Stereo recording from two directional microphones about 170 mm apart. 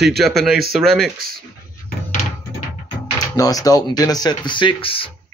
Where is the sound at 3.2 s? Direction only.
20° left (ahead or behind).